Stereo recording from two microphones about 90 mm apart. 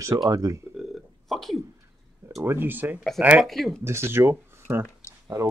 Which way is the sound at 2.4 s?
25° right (ahead or behind).